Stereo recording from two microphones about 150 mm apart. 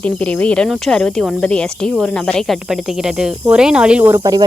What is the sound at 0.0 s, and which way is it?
Speech, 10° left (ahead or behind).